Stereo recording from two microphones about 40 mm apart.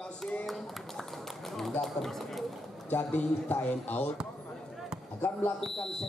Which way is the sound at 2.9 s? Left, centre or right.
Left.